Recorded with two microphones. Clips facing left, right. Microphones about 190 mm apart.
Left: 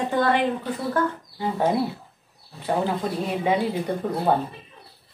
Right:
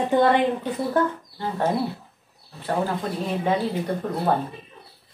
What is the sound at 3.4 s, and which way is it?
Speech, 10° left (ahead or behind).